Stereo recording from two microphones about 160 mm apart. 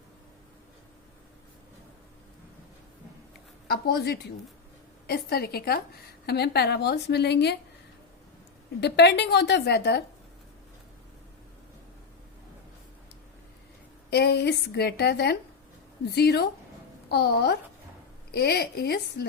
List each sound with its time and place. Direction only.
3.7 s a woman's voice: 85° left
6.2 s a woman's voice: 90° left
8.8 s a woman's voice: 90° left
14.1 s a woman's voice: 90° left